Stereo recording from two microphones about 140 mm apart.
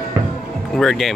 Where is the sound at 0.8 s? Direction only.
5° left (ahead or behind).